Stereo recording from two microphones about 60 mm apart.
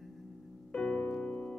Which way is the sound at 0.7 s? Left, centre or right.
Centre.